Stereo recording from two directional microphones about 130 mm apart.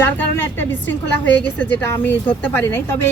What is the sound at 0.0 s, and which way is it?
Speech, 15° left (ahead or behind).